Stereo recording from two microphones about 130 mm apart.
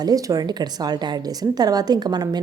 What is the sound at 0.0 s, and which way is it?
A woman's voice, 30° right (ahead or behind).